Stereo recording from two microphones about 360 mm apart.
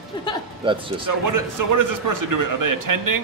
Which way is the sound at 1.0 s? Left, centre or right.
Right.